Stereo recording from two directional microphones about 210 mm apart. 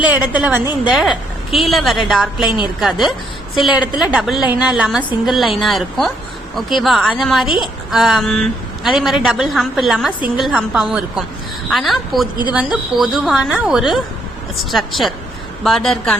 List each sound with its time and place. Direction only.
0.0 s a woman's voice: 5° right (ahead or behind)
7.4 s a woman's voice: 25° left (ahead or behind)
7.9 s a woman's voice: centre (ahead or behind)